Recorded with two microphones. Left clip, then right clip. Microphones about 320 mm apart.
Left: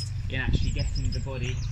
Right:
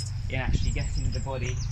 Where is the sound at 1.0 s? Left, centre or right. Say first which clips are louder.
Left 1 dB; right.